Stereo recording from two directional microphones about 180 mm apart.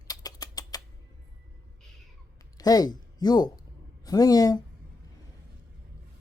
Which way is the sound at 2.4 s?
20° left (ahead or behind).